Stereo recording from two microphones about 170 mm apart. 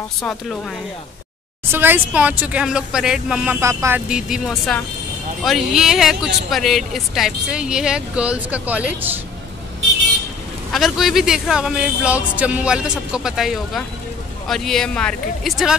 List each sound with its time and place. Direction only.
0.2 s a man's voice: 5° left (ahead or behind)
1.7 s speech: 10° right (ahead or behind)
3.6 s speech: 15° right (ahead or behind)
4.1 s a man's voice: 5° right (ahead or behind)
10.7 s a man's voice: centre (ahead or behind)